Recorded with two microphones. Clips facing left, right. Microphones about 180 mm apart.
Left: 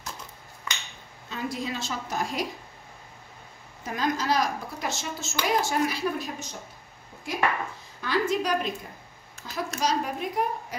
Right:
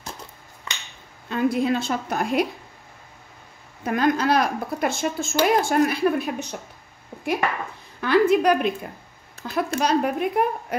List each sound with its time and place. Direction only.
1.3 s a woman's voice: 60° right (ahead or behind)
3.8 s a woman's voice: 60° right (ahead or behind)
8.0 s a woman's voice: 60° right (ahead or behind)